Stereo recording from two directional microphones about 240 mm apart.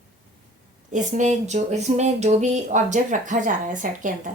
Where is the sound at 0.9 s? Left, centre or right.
Right.